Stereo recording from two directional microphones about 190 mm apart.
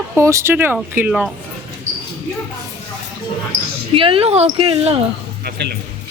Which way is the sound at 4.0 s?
30° right (ahead or behind).